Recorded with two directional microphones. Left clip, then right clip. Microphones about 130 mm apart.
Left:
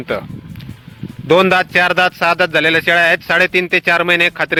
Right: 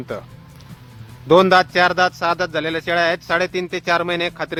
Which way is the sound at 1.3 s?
20° left (ahead or behind).